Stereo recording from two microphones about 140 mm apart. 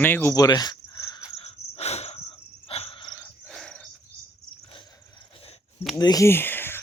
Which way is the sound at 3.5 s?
5° left (ahead or behind).